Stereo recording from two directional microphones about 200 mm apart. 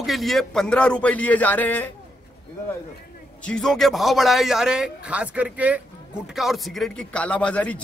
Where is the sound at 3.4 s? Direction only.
5° left (ahead or behind).